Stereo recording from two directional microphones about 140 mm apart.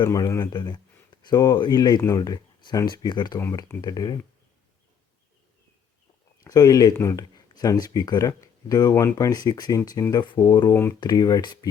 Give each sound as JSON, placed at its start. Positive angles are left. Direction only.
{"t": 0.0, "sound": "speech", "side_deg": 25}
{"t": 6.4, "sound": "speech", "side_deg": 25}